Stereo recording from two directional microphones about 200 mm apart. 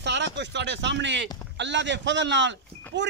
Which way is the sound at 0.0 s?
60° right (ahead or behind).